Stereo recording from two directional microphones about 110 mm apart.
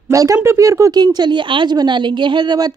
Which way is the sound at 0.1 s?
30° right (ahead or behind).